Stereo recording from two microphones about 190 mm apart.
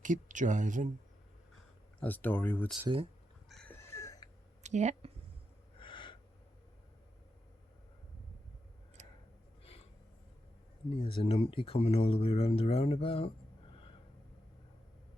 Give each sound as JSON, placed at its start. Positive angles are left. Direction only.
{"t": 0.0, "sound": "speech", "side_deg": -40}
{"t": 2.0, "sound": "speech", "side_deg": 10}
{"t": 3.5, "sound": "a sound", "side_deg": 5}
{"t": 4.6, "sound": "speech", "side_deg": -40}
{"t": 5.7, "sound": "gasp", "side_deg": 25}
{"t": 9.0, "sound": "a sound", "side_deg": -40}
{"t": 10.9, "sound": "speech", "side_deg": 30}